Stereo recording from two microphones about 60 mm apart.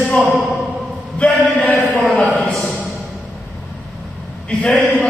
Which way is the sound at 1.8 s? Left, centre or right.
Left.